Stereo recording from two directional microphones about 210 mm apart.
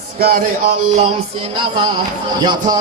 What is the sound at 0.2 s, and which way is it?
Speech, 45° right (ahead or behind).